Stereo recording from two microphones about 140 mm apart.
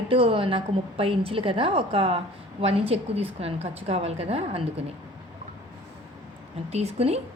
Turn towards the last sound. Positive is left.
turn(degrees=-50)  # may be behind; listen again after turning